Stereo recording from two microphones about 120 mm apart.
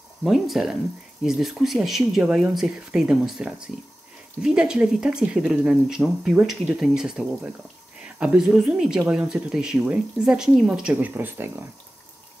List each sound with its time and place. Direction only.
0.2 s speech: 5° right (ahead or behind)